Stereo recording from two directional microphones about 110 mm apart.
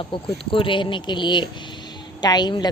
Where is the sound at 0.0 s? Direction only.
50° left (ahead or behind).